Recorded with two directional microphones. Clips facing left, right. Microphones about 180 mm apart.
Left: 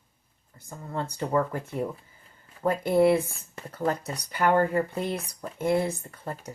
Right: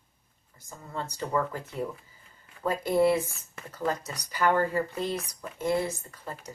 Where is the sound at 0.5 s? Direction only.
55° left (ahead or behind).